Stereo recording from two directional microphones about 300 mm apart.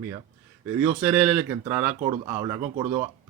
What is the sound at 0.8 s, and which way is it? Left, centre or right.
Speech, centre.